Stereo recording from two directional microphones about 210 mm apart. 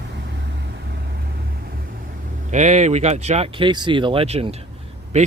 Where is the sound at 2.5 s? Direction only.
30° right (ahead or behind).